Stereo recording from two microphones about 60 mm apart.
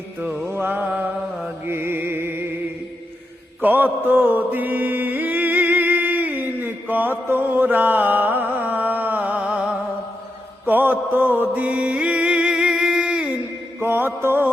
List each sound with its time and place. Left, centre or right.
0.4 s a sound: right
1.6 s music: right
3.6 s mantra: right
10.7 s music: right
13.7 s mantra: right